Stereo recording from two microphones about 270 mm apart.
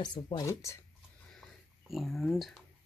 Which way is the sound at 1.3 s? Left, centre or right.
Centre.